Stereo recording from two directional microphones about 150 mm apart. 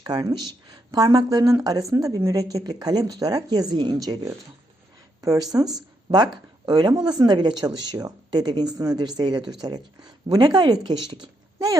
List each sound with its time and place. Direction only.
0.0 s speech: 25° right (ahead or behind)